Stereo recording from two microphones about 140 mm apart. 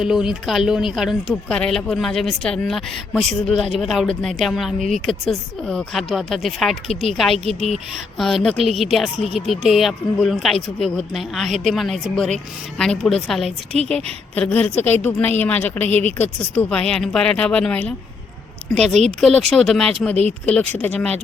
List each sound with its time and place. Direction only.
0.0 s speech: 5° right (ahead or behind); by 15.9 s 15° left (ahead or behind)
15.9 s speech: 50° right (ahead or behind)
16.1 s speech: 10° left (ahead or behind)